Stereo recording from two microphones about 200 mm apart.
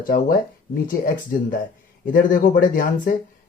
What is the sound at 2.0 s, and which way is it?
Speech, 45° left (ahead or behind).